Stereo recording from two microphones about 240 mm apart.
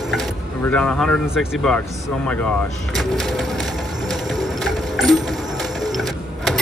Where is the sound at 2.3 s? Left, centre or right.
Centre.